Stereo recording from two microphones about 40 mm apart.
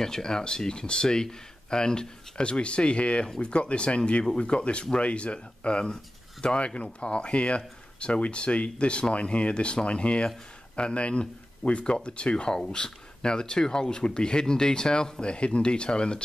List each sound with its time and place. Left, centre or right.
0.0 s speech: centre